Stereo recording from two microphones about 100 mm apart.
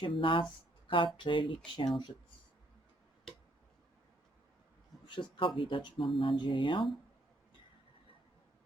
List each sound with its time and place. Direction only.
0.0 s speech: 60° left (ahead or behind)
5.4 s speech: 60° left (ahead or behind)